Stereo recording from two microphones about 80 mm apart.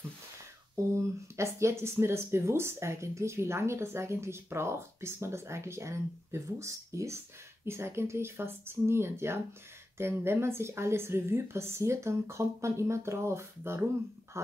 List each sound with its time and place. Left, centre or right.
0.9 s speech: right